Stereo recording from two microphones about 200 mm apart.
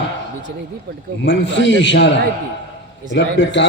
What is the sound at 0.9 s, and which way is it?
Speech, 60° right (ahead or behind).